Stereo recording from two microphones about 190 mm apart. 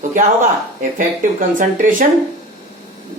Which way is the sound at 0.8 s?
45° right (ahead or behind).